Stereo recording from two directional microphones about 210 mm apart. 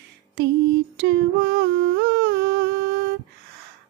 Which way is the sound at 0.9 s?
55° right (ahead or behind).